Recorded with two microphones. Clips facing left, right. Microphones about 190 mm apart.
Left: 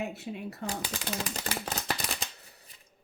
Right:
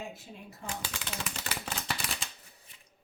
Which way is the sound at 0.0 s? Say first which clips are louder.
Left 8 dB; 70° left (ahead or behind).